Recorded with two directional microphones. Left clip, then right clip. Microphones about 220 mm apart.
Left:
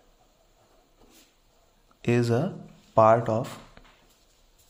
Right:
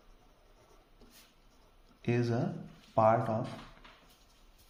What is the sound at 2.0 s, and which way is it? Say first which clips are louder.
Speech: left 8 dB; 45° left (ahead or behind).